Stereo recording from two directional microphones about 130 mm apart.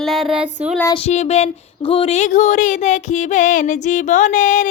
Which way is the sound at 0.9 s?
55° left (ahead or behind).